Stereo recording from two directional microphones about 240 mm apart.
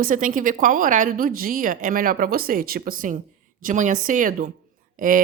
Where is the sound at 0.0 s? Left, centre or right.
Right.